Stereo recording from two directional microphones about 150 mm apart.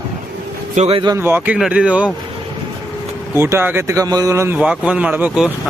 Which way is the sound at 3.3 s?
15° right (ahead or behind).